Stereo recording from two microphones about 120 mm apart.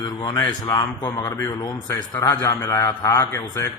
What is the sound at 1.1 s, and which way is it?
A man's voice, 25° left (ahead or behind).